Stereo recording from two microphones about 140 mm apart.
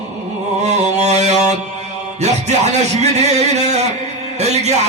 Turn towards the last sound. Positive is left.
turn(degrees=-50)  # may be behind; listen again after turning